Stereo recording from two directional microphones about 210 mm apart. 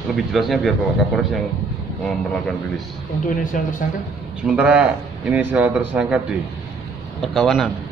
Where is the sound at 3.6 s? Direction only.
40° left (ahead or behind).